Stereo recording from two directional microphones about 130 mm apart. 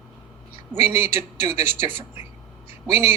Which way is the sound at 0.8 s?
15° right (ahead or behind).